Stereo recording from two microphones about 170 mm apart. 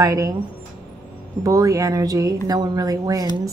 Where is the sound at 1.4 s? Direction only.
20° right (ahead or behind).